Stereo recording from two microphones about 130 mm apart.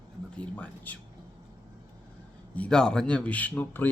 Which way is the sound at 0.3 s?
10° left (ahead or behind).